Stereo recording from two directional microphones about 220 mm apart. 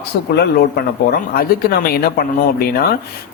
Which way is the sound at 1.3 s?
40° left (ahead or behind).